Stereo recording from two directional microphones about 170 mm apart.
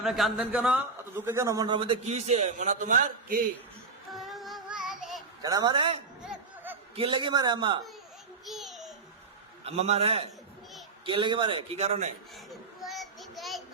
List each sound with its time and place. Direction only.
0.0 s a man's voice: centre (ahead or behind); by 3.4 s 55° right (ahead or behind)
4.1 s music: centre (ahead or behind)
5.4 s a man's voice: 20° right (ahead or behind)
6.2 s music: 10° right (ahead or behind)
6.9 s a man's voice: 30° right (ahead or behind)
8.4 s child singing: centre (ahead or behind)
9.6 s a man's voice: 40° right (ahead or behind)
12.8 s child singing: centre (ahead or behind)